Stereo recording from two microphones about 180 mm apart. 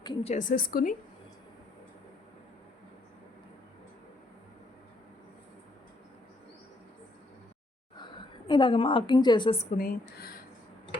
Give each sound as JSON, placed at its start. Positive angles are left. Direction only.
{"t": 0.2, "sound": "a woman's voice", "side_deg": 40}
{"t": 8.4, "sound": "a woman's voice", "side_deg": 25}
{"t": 9.7, "sound": "speech", "side_deg": 55}